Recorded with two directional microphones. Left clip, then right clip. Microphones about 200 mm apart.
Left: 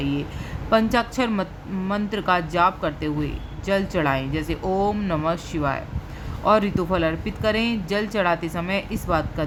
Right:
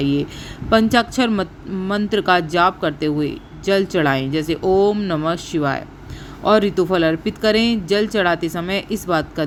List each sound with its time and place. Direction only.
0.0 s speech: 25° right (ahead or behind)